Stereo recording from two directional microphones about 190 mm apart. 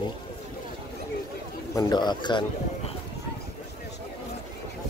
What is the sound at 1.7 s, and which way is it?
A man's voice, 20° left (ahead or behind).